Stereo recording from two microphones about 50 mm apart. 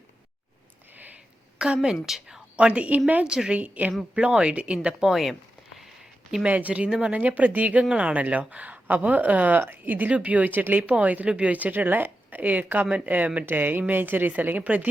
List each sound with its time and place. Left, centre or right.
1.5 s a woman's voice: centre
2.6 s speech: right
3.2 s speech: centre
3.6 s speech: right
4.1 s speech: centre
5.0 s a sound: centre
6.4 s speech: right
13.4 s speech: right